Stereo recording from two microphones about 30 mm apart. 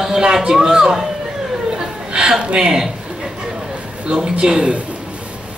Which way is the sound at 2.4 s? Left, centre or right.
Right.